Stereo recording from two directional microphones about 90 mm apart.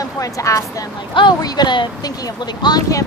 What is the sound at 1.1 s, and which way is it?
Speech, 55° left (ahead or behind).